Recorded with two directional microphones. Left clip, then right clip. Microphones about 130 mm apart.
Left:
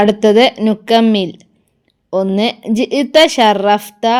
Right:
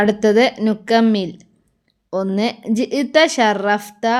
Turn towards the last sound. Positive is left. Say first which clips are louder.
# left 5 dB
turn(degrees=40)  # may be behind; listen again after turning